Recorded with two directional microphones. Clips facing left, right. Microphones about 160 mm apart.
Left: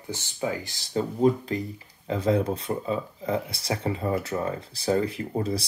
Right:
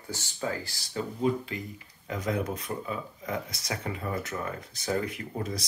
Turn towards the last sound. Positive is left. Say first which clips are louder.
# left 6 dB
turn(degrees=30)  # may be behind; listen again after turning